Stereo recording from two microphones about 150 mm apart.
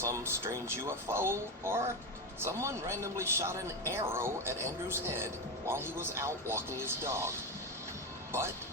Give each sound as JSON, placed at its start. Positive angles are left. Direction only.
{"t": 0.0, "sound": "a man's voice", "side_deg": -15}